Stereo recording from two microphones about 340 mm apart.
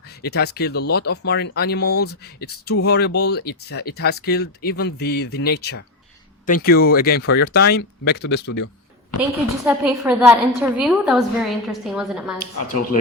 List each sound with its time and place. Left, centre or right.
0.2 s speech: left
9.6 s a woman's voice: centre